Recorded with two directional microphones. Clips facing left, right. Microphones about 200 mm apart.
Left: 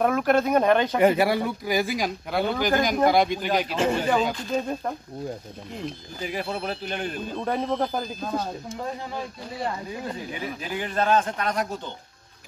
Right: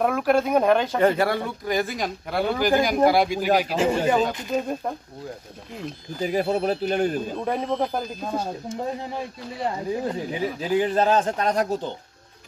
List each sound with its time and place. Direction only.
0.0 s speech: centre (ahead or behind)
0.9 s speech: 10° left (ahead or behind)
4.3 s speech: 20° right (ahead or behind)
4.6 s speech: 5° right (ahead or behind)
6.2 s speech: 40° right (ahead or behind)
7.2 s speech: 5° right (ahead or behind)
10.8 s speech: 35° right (ahead or behind)